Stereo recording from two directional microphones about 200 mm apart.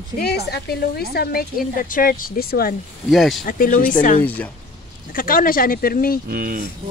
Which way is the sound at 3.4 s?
45° left (ahead or behind).